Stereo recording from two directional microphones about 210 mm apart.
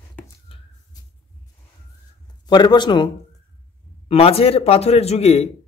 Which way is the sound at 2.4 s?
20° left (ahead or behind).